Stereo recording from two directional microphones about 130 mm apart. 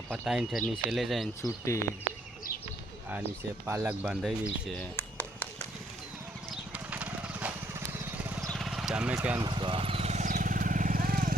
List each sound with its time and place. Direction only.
0.1 s speech: 5° right (ahead or behind)
1.4 s speech: 20° left (ahead or behind)
3.7 s speech: 10° right (ahead or behind)
4.9 s a sound: 15° left (ahead or behind)
6.5 s horse: 10° right (ahead or behind)
7.9 s vehicle: 15° right (ahead or behind)
8.4 s vehicle: centre (ahead or behind)
9.1 s speech: 15° right (ahead or behind)
9.4 s vehicle: 35° right (ahead or behind); by 11.3 s 90° right